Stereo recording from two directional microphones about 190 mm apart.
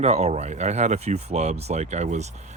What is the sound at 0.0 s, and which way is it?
Speech, 35° right (ahead or behind).